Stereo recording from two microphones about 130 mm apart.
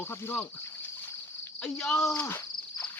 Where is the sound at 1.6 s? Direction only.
5° left (ahead or behind).